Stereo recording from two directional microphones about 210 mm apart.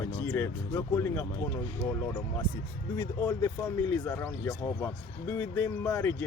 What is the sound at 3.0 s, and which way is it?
Speech, 15° left (ahead or behind).